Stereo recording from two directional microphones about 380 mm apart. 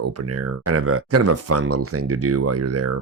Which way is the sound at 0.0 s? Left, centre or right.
Right.